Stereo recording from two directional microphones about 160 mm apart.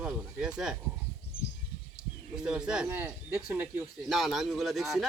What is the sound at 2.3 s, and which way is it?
Speech, 5° right (ahead or behind).